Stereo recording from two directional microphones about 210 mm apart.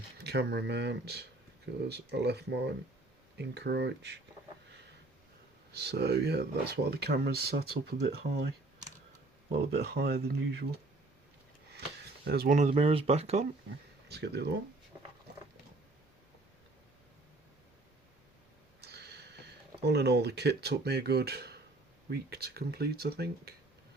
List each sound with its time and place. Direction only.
0.2 s speech: 50° right (ahead or behind)
5.7 s speech: 50° right (ahead or behind)
12.2 s speech: 50° right (ahead or behind); by 13.5 s 30° right (ahead or behind)
14.1 s speech: 50° right (ahead or behind)
18.8 s a sound: 50° right (ahead or behind)
22.1 s speech: 50° right (ahead or behind)